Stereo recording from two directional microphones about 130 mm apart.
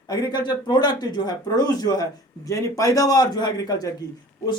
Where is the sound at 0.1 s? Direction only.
30° left (ahead or behind).